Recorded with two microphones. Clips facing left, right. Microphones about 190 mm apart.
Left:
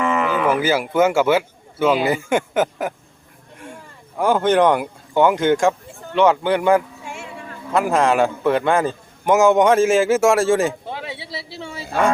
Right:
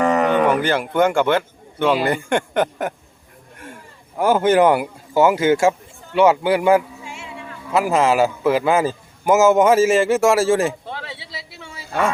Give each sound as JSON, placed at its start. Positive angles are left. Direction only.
{"t": 0.0, "sound": "cattle", "side_deg": -40}
{"t": 0.4, "sound": "a man's voice", "side_deg": 5}
{"t": 4.2, "sound": "a man's voice", "side_deg": -5}
{"t": 7.0, "sound": "music", "side_deg": 50}
{"t": 7.7, "sound": "a man's voice", "side_deg": -5}
{"t": 10.9, "sound": "speech", "side_deg": 20}
{"t": 11.3, "sound": "speech", "side_deg": 30}